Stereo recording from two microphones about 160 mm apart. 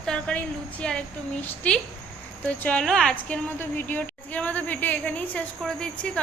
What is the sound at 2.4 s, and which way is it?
A woman's voice, 5° left (ahead or behind).